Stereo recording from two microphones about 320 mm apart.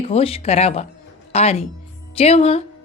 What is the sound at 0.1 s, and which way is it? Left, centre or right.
Speech, centre.